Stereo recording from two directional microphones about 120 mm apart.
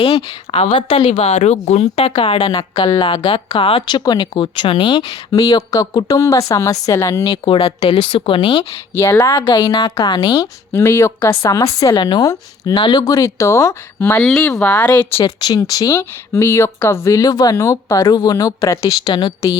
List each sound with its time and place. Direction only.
0.1 s speech: 55° left (ahead or behind)
2.5 s speech: 45° left (ahead or behind)
3.8 s speech: 35° left (ahead or behind)
7.4 s speech: 50° left (ahead or behind)
8.9 s speech: 20° left (ahead or behind)
9.4 s speech: 40° left (ahead or behind)
10.7 s speech: 20° left (ahead or behind)
11.9 s speech: 35° left (ahead or behind)
14.3 s speech: 5° left (ahead or behind)
15.2 s speech: 35° left (ahead or behind)